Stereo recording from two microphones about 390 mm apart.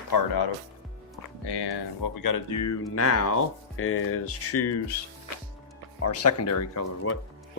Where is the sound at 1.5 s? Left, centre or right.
Left.